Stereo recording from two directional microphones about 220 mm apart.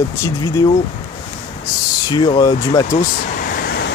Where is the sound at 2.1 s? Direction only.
20° left (ahead or behind).